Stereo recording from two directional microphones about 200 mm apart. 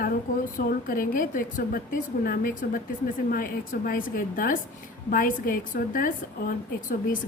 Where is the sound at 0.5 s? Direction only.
45° left (ahead or behind).